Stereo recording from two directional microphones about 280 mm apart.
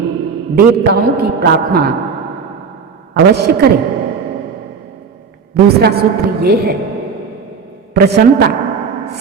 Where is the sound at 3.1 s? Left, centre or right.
Right.